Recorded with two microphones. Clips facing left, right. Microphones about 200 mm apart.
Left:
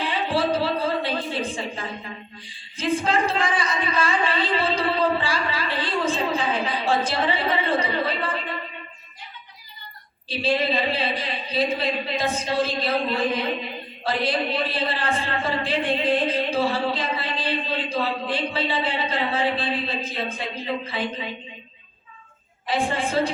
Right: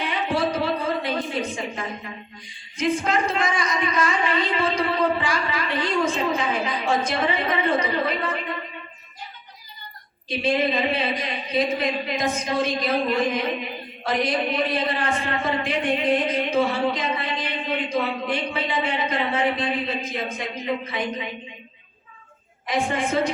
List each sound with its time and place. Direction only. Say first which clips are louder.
0.0 s a sound: even; 30° left (ahead or behind)
10.2 s a man's voice: right 1 dB; 30° left (ahead or behind)
22.6 s a man's voice: even; 30° left (ahead or behind)